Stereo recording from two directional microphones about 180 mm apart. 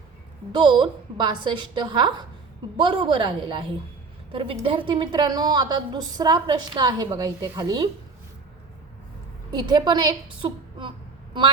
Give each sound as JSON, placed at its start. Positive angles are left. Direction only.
{"t": 0.5, "sound": "a woman's voice", "side_deg": -25}
{"t": 9.5, "sound": "a woman's voice", "side_deg": -25}